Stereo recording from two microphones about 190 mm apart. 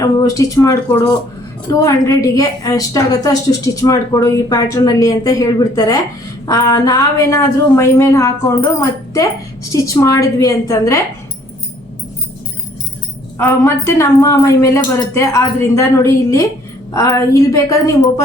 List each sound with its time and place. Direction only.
0.0 s a woman's voice: 20° left (ahead or behind)
13.4 s a woman's voice: 15° left (ahead or behind)